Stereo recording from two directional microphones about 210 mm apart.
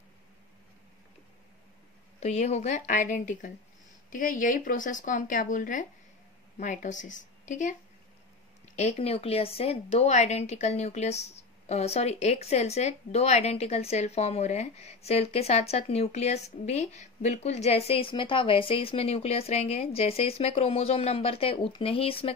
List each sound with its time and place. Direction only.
2.1 s speech: 30° left (ahead or behind)
8.7 s a woman's voice: 30° left (ahead or behind)